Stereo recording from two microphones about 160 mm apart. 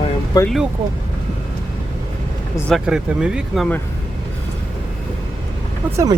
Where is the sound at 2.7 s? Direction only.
Centre (ahead or behind).